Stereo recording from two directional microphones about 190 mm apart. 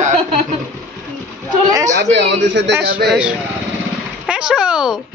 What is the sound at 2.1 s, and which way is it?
Speech, 65° right (ahead or behind).